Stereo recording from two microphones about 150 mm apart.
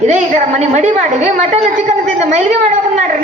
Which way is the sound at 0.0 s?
50° right (ahead or behind).